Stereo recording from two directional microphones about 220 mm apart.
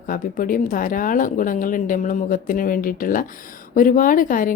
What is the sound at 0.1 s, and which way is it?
Speech, 40° left (ahead or behind).